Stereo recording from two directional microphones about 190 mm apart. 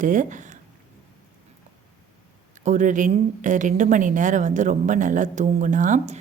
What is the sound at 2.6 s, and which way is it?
A woman's voice, 40° right (ahead or behind).